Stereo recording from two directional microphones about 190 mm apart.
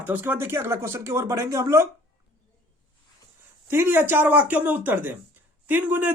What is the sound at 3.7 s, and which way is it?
Speech, 10° right (ahead or behind).